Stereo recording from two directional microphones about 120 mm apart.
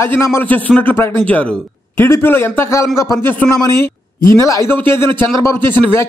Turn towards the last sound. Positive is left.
turn(degrees=20)  # may be behind; listen again after turning